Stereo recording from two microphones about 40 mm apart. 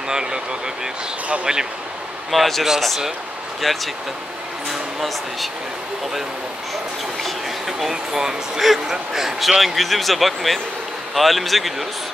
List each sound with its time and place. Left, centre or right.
0.1 s speech: centre
1.4 s speech: centre
2.3 s speech: centre
3.6 s speech: centre
7.2 s a sound: centre
7.9 s speech: centre